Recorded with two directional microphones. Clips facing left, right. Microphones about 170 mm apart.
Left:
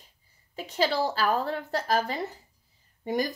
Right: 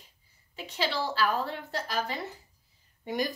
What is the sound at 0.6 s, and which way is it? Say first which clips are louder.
Speech: left 5 dB; 45° left (ahead or behind).